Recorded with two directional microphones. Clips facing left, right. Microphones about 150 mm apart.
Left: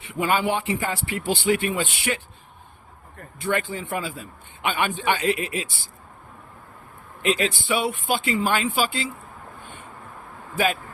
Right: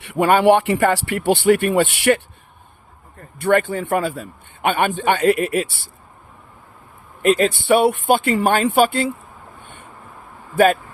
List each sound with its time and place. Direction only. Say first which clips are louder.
0.0 s a man's voice: right 9 dB; 65° right (ahead or behind)
3.3 s a man's voice: right 9 dB; 60° right (ahead or behind)
7.2 s a man's voice: right 7 dB; 50° right (ahead or behind)
10.5 s a man's voice: right 9 dB; 55° right (ahead or behind)